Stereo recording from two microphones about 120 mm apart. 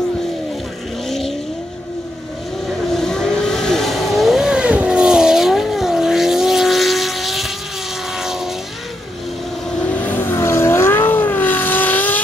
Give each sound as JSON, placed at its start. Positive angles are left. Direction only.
{"t": 1.0, "sound": "vehicle", "side_deg": 0}
{"t": 2.9, "sound": "vehicle", "side_deg": 5}
{"t": 9.8, "sound": "vehicle", "side_deg": 15}